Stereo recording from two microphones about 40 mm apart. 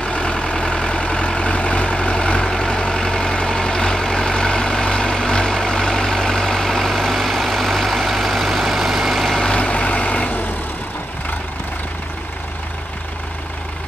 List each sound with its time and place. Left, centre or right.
0.0 s vehicle: left; by 9.4 s centre
9.4 s vehicle: left